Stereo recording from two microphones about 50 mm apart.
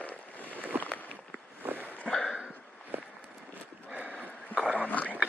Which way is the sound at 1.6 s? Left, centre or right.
Right.